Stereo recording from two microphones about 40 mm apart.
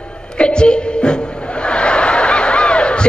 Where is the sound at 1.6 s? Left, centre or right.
Left.